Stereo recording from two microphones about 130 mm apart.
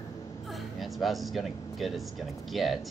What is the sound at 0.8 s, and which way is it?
Speech, centre (ahead or behind).